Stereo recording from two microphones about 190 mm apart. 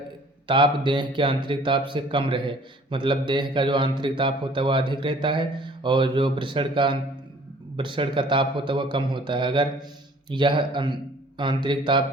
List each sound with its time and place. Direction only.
0.4 s a man's voice: 25° right (ahead or behind)